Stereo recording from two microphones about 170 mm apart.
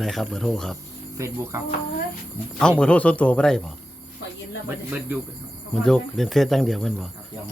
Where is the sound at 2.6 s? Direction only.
5° left (ahead or behind).